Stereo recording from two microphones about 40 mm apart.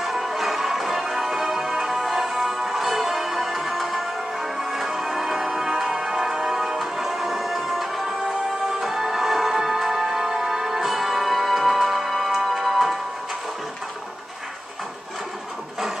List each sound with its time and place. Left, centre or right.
0.0 s music: centre